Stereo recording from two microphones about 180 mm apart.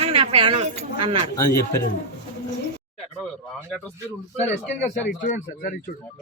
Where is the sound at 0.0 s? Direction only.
35° right (ahead or behind).